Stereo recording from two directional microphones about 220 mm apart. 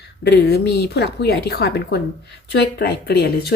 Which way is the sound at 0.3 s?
45° left (ahead or behind).